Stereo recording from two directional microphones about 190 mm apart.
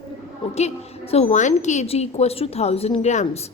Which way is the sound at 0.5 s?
35° left (ahead or behind).